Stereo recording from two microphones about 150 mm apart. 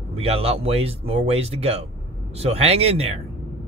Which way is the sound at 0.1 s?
40° right (ahead or behind).